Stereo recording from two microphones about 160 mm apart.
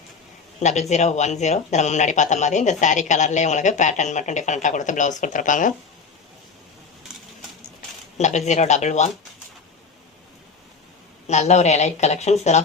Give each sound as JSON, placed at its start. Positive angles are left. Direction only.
{"t": 0.6, "sound": "speech", "side_deg": 45}
{"t": 8.2, "sound": "speech", "side_deg": 45}
{"t": 11.3, "sound": "speech", "side_deg": 45}